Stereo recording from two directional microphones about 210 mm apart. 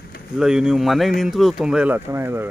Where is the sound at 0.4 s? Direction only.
5° right (ahead or behind).